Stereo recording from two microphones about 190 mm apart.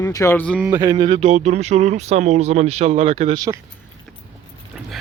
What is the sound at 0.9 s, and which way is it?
Speech, 30° right (ahead or behind).